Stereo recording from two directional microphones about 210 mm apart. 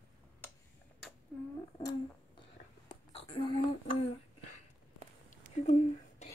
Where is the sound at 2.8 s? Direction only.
25° left (ahead or behind).